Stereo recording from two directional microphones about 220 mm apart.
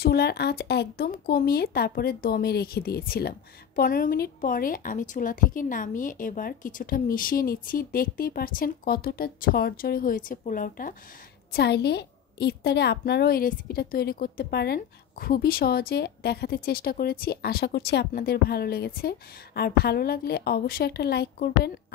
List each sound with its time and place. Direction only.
0.0 s speech: 45° left (ahead or behind)
11.5 s a woman's voice: 50° left (ahead or behind)